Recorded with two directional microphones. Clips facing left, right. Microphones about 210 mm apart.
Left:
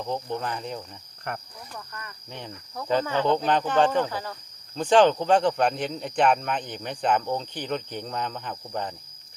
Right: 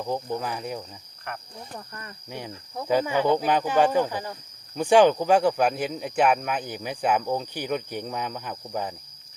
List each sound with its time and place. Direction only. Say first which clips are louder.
0.0 s speech: right 1 dB; 10° right (ahead or behind)
1.9 s speech: right 1 dB; 25° right (ahead or behind)
2.8 s speech: right 1 dB; 10° right (ahead or behind)